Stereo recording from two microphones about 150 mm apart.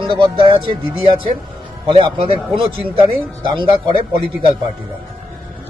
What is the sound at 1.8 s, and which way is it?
A man's voice, 35° right (ahead or behind).